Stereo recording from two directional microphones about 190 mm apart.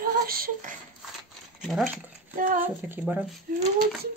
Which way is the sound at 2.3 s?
45° right (ahead or behind).